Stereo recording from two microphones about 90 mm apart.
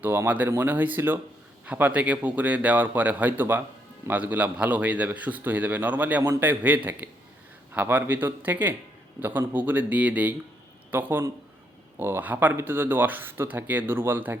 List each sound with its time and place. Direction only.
0.0 s a man's voice: 20° right (ahead or behind)